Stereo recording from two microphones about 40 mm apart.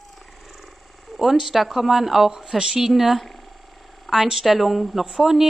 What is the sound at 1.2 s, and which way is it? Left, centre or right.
A woman's voice, centre.